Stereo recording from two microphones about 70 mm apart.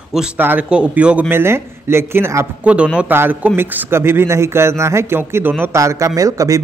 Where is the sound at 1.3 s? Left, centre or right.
Right.